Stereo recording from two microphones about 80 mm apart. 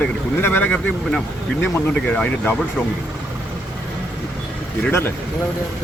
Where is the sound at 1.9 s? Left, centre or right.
Centre.